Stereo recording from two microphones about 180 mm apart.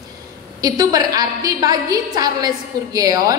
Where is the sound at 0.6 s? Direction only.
20° right (ahead or behind).